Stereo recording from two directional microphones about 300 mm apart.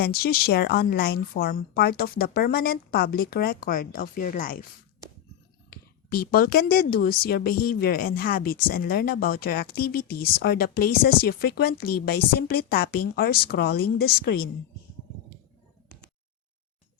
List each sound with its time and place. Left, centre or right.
0.0 s a woman's voice: left
5.7 s a woman's voice: left